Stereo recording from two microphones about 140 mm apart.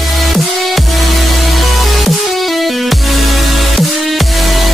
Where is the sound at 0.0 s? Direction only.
Centre (ahead or behind).